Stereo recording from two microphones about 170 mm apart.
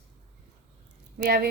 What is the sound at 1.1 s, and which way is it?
Speech, 65° right (ahead or behind).